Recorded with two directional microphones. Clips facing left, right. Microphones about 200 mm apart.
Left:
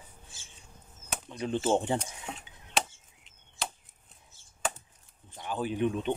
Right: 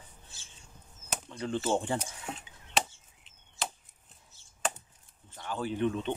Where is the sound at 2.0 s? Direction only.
Centre (ahead or behind).